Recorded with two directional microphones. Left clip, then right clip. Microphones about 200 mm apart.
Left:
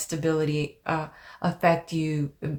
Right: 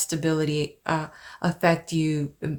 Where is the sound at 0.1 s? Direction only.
30° right (ahead or behind).